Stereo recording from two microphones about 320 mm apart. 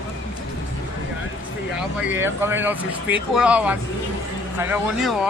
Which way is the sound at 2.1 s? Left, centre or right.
Centre.